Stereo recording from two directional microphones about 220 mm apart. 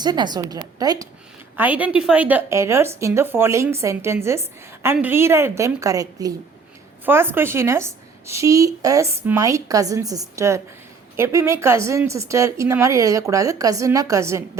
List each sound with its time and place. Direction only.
0.0 s a woman's voice: 20° right (ahead or behind)